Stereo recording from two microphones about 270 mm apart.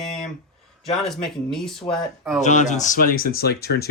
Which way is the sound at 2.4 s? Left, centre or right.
Left.